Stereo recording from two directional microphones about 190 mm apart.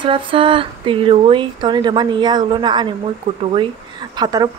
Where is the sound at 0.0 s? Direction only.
25° right (ahead or behind).